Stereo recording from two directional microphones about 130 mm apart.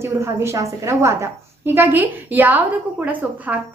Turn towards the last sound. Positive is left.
turn(degrees=-10)  # may be behind; listen again after turning